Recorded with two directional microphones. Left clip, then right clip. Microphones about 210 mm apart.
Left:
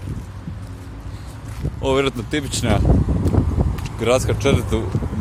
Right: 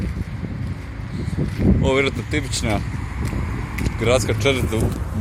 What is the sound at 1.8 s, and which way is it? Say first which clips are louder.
Speech: left 3 dB; 15° left (ahead or behind).